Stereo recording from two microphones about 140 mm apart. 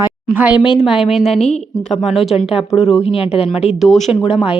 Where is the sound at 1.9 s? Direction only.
Centre (ahead or behind).